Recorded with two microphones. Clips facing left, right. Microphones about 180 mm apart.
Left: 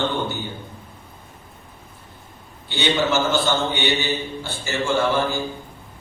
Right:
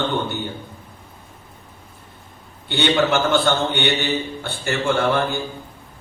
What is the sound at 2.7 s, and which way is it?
A man's voice, 60° right (ahead or behind).